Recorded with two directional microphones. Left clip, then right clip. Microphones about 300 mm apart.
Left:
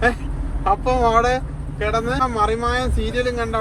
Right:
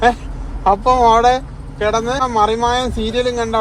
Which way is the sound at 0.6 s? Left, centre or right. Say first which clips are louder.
Right 6 dB; centre.